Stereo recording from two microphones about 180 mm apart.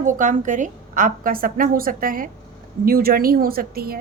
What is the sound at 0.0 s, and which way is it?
A woman's voice, 45° right (ahead or behind).